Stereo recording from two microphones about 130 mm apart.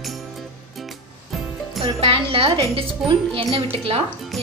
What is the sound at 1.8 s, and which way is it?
Speech, 45° right (ahead or behind).